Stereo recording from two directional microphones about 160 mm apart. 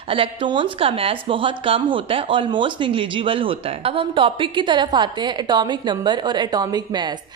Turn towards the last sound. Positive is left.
turn(degrees=-25)  # may be behind; listen again after turning